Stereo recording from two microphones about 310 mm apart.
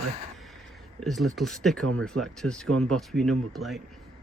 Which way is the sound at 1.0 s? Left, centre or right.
Centre.